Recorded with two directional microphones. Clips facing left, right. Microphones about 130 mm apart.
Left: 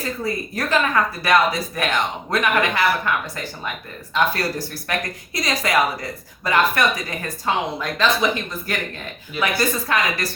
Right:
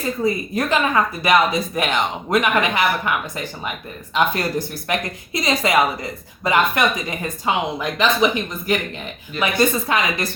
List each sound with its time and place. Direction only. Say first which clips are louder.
0.2 s speech: right 5 dB; 20° right (ahead or behind)